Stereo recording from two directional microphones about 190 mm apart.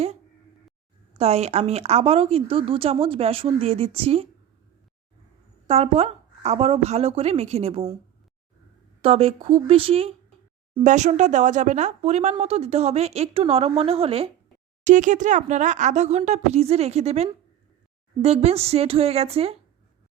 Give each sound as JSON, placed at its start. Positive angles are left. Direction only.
{"t": 1.2, "sound": "speech", "side_deg": -35}
{"t": 5.6, "sound": "speech", "side_deg": -30}
{"t": 9.0, "sound": "speech", "side_deg": -30}
{"t": 14.8, "sound": "speech", "side_deg": -40}